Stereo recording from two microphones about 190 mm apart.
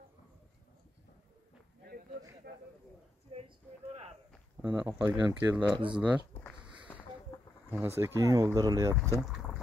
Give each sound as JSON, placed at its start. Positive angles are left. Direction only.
{"t": 2.4, "sound": "speech", "side_deg": -55}
{"t": 3.3, "sound": "speech", "side_deg": -30}
{"t": 4.6, "sound": "speech", "side_deg": -10}
{"t": 6.9, "sound": "a sound", "side_deg": 10}
{"t": 7.3, "sound": "insect", "side_deg": 15}
{"t": 7.7, "sound": "speech", "side_deg": -15}